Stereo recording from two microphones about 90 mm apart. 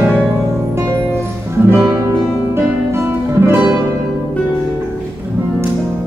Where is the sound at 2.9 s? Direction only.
25° right (ahead or behind).